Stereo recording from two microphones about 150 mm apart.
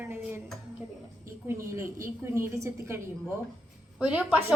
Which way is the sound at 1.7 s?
20° right (ahead or behind).